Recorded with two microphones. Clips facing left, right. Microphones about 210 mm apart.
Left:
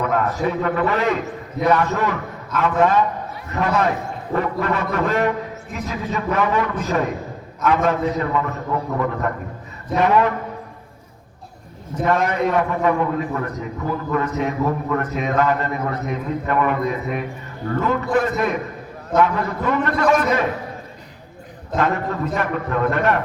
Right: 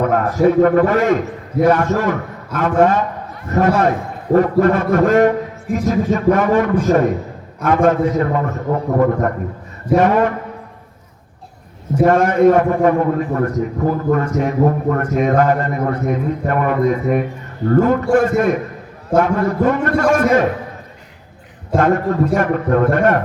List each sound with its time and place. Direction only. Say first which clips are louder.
0.0 s a man's voice: right 7 dB; 45° right (ahead or behind)
12.0 s a man's voice: right 8 dB; 50° right (ahead or behind)
21.8 s a man's voice: right 6 dB; 50° right (ahead or behind)